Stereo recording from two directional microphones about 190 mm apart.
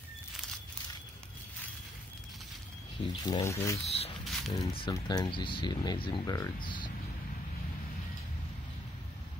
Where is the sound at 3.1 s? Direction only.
30° left (ahead or behind).